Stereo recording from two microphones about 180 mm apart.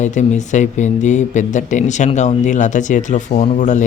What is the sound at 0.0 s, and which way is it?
Speech, 40° left (ahead or behind).